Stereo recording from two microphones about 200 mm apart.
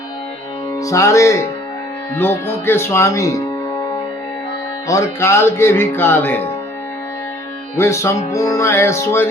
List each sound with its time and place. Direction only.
0.8 s music: 15° left (ahead or behind)
4.9 s music: 15° left (ahead or behind)
7.8 s music: 15° left (ahead or behind)